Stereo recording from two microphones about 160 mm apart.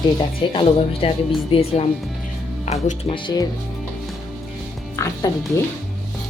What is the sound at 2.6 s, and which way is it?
Speech, 45° left (ahead or behind).